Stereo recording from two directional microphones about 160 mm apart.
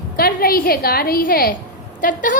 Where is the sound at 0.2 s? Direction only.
70° left (ahead or behind).